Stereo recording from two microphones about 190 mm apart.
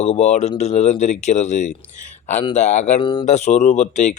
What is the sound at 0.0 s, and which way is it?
Speech, 35° left (ahead or behind).